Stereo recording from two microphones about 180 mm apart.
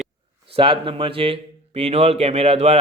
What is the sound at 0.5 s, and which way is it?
A man's voice, 30° right (ahead or behind).